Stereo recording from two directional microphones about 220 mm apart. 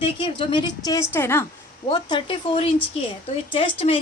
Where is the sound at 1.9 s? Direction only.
20° left (ahead or behind).